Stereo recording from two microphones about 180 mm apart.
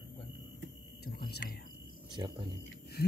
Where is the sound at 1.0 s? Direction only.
60° left (ahead or behind).